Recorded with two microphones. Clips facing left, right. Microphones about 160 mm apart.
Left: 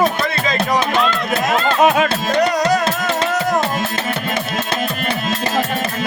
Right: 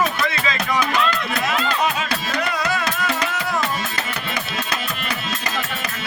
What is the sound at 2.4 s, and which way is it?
Music, 40° left (ahead or behind).